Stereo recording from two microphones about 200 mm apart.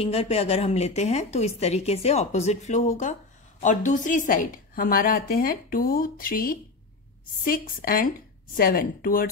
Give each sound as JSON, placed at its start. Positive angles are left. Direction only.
{"t": 0.0, "sound": "a woman's voice", "side_deg": 30}